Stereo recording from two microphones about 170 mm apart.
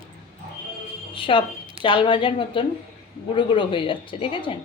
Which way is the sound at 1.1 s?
30° left (ahead or behind).